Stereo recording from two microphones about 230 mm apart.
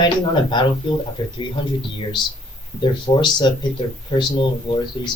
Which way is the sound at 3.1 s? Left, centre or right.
Centre.